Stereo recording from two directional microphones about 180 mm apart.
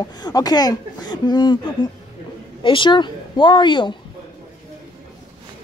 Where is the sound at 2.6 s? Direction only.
30° left (ahead or behind).